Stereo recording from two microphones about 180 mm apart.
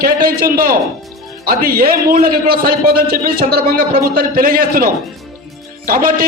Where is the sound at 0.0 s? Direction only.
55° right (ahead or behind).